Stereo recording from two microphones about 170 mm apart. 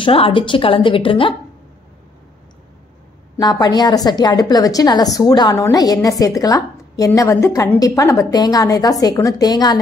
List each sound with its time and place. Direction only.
0.0 s a woman's voice: 30° left (ahead or behind)
3.3 s a woman's voice: 25° left (ahead or behind)